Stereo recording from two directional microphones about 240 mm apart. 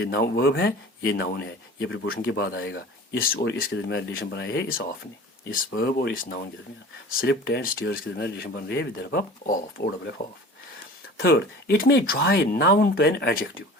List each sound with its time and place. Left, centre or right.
0.0 s speech: left
11.2 s speech: left